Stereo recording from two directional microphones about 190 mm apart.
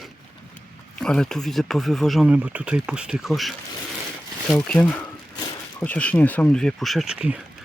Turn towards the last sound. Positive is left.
turn(degrees=-5)  # may be behind; listen again after turning